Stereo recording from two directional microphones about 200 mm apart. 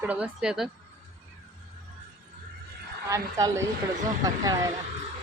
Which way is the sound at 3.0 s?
15° right (ahead or behind).